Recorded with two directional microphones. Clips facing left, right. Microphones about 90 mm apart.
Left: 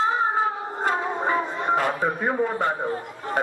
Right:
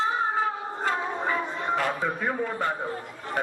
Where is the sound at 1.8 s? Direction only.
40° left (ahead or behind).